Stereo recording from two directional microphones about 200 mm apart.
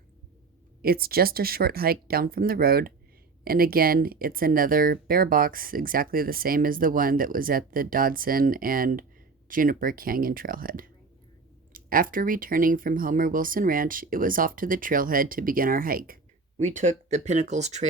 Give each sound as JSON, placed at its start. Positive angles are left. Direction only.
{"t": 0.8, "sound": "speech", "side_deg": -50}